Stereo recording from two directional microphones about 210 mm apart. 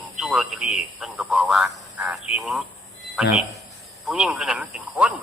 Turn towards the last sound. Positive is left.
turn(degrees=-5)  # may be behind; listen again after turning